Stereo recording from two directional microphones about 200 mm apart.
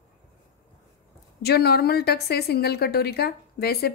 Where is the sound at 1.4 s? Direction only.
55° left (ahead or behind).